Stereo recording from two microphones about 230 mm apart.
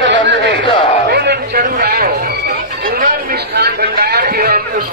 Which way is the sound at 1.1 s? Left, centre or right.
Right.